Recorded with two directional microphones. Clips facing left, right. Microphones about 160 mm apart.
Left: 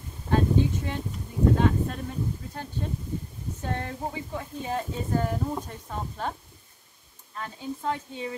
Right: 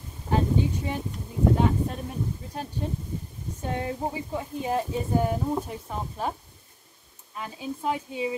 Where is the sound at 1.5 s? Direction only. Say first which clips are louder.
Right 1 dB; 15° right (ahead or behind).